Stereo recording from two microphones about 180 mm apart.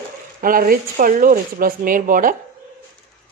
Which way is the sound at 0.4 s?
50° right (ahead or behind).